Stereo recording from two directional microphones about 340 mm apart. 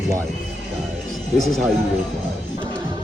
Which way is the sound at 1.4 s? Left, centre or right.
Centre.